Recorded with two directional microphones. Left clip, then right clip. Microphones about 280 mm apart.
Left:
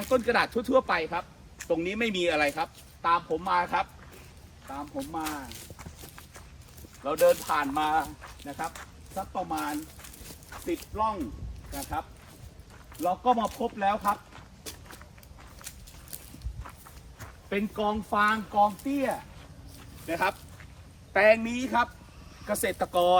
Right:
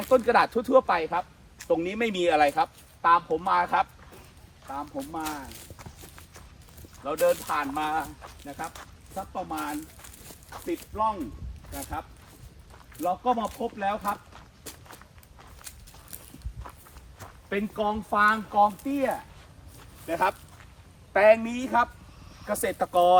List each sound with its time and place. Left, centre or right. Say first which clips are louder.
0.0 s speech: right 4 dB; centre
4.6 s walk: right 2 dB; centre
7.0 s speech: left 2 dB; centre
16.6 s walk: right 2 dB; centre
17.2 s speech: right 1 dB; centre